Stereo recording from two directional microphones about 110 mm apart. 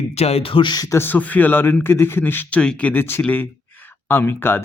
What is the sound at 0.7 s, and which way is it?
Speech, 35° left (ahead or behind).